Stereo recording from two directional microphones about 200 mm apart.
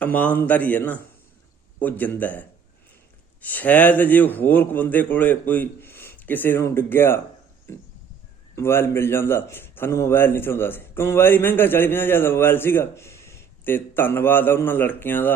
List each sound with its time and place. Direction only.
0.0 s speech: 10° left (ahead or behind)
8.5 s speech: 10° left (ahead or behind)